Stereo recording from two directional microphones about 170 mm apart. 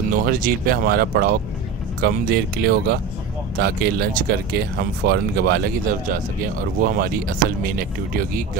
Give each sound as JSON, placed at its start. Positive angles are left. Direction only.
{"t": 0.2, "sound": "speech", "side_deg": -60}